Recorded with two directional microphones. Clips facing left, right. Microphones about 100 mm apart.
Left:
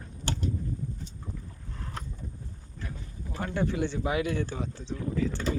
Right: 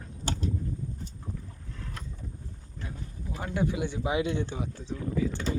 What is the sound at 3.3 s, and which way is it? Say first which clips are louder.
Speech: even; 10° right (ahead or behind).